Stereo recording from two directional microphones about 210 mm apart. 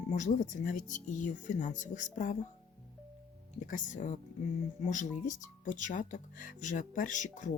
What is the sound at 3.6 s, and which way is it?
Speech, 40° left (ahead or behind).